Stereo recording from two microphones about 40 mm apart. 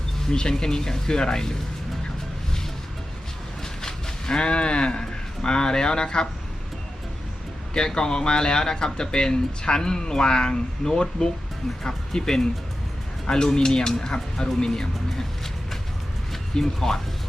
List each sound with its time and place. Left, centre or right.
0.3 s speech: centre
3.6 s speech: centre
7.7 s speech: centre
16.3 s speech: centre